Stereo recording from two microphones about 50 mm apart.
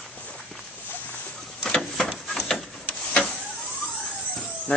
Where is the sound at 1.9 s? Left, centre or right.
Centre.